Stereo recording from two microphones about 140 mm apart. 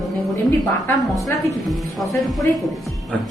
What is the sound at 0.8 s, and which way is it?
Speech, 20° left (ahead or behind).